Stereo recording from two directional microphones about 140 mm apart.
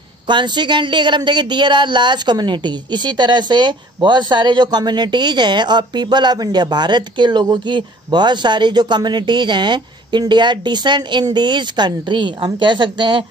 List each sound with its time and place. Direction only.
0.3 s speech: 35° right (ahead or behind)